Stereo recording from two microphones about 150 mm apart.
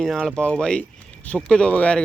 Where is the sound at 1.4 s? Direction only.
5° left (ahead or behind).